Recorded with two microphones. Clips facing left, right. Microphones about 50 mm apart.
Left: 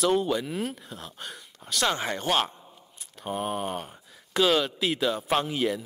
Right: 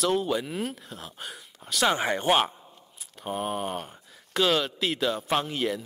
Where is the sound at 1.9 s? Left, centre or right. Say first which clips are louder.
Right 3 dB; centre.